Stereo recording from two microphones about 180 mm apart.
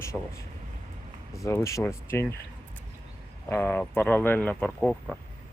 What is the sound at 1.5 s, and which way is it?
Speech, 15° left (ahead or behind).